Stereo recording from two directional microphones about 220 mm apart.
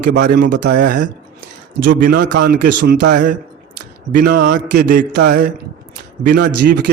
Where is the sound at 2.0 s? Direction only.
50° right (ahead or behind).